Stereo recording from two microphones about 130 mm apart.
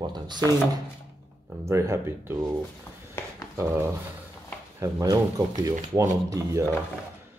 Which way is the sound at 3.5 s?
20° right (ahead or behind).